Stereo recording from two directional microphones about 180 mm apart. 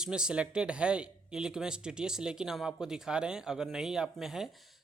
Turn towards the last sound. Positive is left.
turn(degrees=0)  # may be behind; listen again after turning